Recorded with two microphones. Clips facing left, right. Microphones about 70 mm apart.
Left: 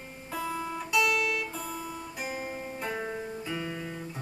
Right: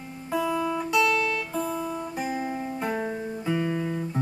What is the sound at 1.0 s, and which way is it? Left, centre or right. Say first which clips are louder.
Music: right 4 dB; centre.